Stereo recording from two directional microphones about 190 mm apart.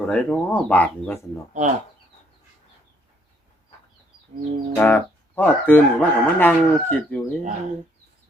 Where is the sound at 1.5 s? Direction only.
40° right (ahead or behind).